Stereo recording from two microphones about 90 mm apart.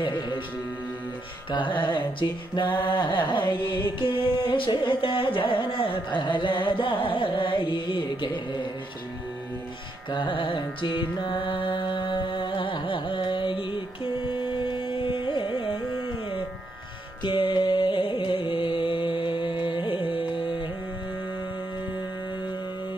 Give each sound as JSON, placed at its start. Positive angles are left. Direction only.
{"t": 1.5, "sound": "music", "side_deg": 60}
{"t": 10.1, "sound": "carnatic music", "side_deg": 65}